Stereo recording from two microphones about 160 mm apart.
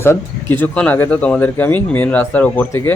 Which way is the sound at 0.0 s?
15° left (ahead or behind).